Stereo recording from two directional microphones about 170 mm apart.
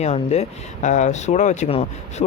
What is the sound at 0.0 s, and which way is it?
Speech, 40° left (ahead or behind).